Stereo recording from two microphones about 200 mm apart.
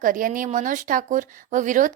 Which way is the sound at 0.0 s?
45° right (ahead or behind).